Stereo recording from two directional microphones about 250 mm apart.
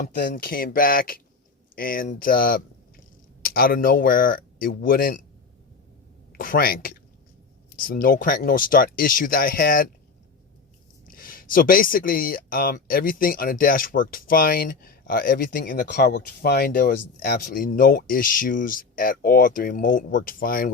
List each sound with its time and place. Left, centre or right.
0.2 s speech: left
6.3 s speech: left
11.1 s speech: left